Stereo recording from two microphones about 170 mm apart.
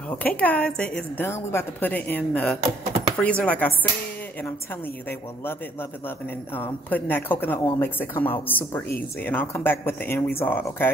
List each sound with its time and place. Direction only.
0.2 s a man's voice: 10° left (ahead or behind)
5.4 s a man's voice: 10° left (ahead or behind)